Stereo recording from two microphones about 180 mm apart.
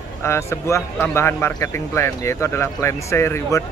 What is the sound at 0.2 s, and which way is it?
Speech, 15° left (ahead or behind).